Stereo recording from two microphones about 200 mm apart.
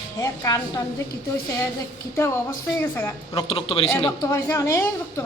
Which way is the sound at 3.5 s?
30° left (ahead or behind).